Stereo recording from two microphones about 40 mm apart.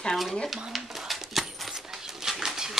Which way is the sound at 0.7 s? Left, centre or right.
Centre.